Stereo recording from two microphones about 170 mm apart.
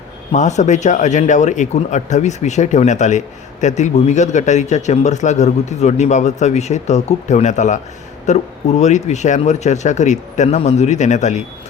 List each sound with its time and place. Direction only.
0.3 s speech: 45° left (ahead or behind)